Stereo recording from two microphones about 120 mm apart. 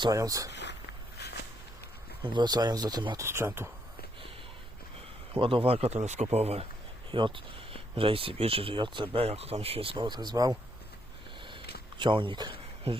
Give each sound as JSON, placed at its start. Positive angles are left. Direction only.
{"t": 0.0, "sound": "speech", "side_deg": -30}
{"t": 2.2, "sound": "speech", "side_deg": -40}
{"t": 3.2, "sound": "speech", "side_deg": -20}
{"t": 5.3, "sound": "speech", "side_deg": -45}
{"t": 6.3, "sound": "speech", "side_deg": -60}
{"t": 7.1, "sound": "speech", "side_deg": -45}
{"t": 11.4, "sound": "a sound", "side_deg": -45}